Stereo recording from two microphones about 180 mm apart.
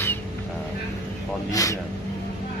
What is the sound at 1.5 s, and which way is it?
Speech, 20° left (ahead or behind).